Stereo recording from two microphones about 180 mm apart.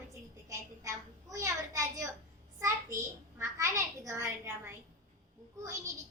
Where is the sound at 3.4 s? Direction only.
15° right (ahead or behind).